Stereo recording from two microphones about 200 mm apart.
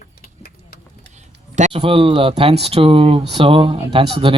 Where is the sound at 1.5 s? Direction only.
30° right (ahead or behind).